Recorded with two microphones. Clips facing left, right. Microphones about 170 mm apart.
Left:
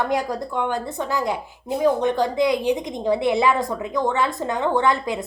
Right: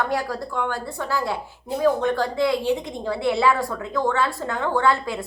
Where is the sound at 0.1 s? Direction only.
20° left (ahead or behind).